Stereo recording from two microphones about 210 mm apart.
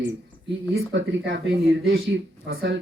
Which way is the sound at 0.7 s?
60° right (ahead or behind).